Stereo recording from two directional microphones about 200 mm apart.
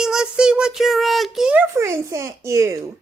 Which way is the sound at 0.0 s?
5° right (ahead or behind).